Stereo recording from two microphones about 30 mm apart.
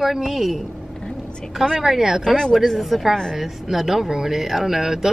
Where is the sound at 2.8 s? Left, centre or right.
Centre.